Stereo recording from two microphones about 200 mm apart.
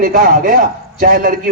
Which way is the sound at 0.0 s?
45° right (ahead or behind).